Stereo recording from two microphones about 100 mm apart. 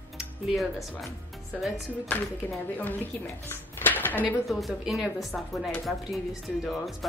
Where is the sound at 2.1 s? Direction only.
15° left (ahead or behind).